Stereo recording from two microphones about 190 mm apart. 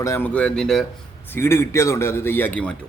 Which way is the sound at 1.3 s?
10° left (ahead or behind).